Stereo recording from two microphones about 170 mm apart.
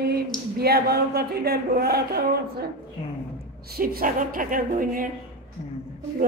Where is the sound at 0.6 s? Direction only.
65° right (ahead or behind).